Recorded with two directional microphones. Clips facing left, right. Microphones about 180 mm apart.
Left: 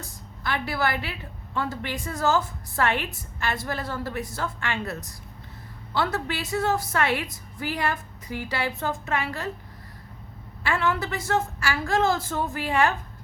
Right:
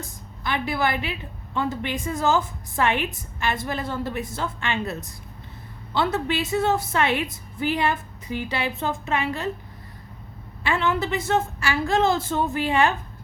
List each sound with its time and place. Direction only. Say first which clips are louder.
0.4 s a woman's voice: right 2 dB; 20° right (ahead or behind)
10.6 s a woman's voice: right 2 dB; 20° right (ahead or behind)